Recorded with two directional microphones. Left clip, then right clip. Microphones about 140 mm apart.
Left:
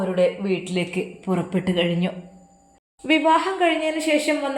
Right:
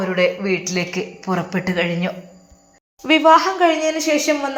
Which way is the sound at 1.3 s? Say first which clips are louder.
Right 4 dB; 5° left (ahead or behind).